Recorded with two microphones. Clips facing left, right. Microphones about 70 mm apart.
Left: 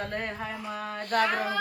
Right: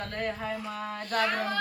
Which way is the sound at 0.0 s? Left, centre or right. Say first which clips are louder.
Even; centre.